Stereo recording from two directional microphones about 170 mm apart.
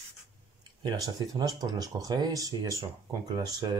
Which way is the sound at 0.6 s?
25° right (ahead or behind).